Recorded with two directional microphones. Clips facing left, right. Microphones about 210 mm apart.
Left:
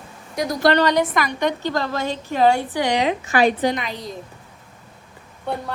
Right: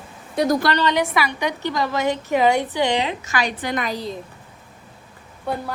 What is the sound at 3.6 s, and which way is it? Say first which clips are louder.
Speech: left 3 dB; 50° right (ahead or behind).